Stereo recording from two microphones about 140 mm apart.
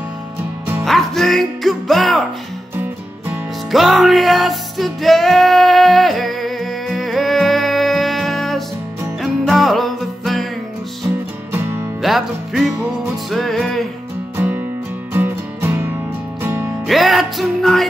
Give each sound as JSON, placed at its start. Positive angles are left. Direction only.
{"t": 0.8, "sound": "music", "side_deg": 0}
{"t": 2.7, "sound": "music", "side_deg": -15}
{"t": 3.7, "sound": "music", "side_deg": 0}
{"t": 12.0, "sound": "music", "side_deg": 0}
{"t": 14.3, "sound": "music", "side_deg": -15}
{"t": 16.8, "sound": "music", "side_deg": 0}